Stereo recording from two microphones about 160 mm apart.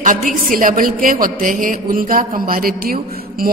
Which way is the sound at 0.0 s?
55° right (ahead or behind).